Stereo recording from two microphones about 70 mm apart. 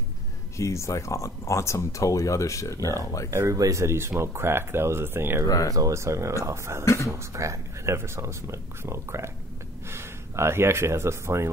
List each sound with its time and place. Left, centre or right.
0.6 s speech: left
3.3 s speech: right
3.8 s speech: right
5.7 s speech: right
5.9 s speech: right
6.8 s speech: left
7.1 s speech: right